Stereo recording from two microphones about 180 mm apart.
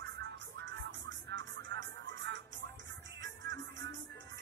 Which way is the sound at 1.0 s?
90° right.